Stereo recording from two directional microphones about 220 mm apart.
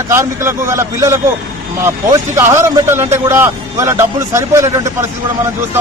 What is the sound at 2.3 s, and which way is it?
A man's voice, 10° right (ahead or behind).